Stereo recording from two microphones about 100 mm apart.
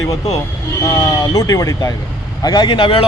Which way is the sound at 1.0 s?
40° left (ahead or behind).